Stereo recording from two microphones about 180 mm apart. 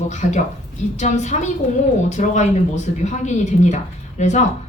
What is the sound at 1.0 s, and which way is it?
A woman's voice, 40° left (ahead or behind).